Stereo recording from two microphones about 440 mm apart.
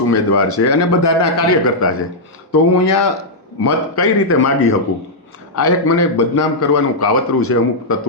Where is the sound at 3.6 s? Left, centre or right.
Left.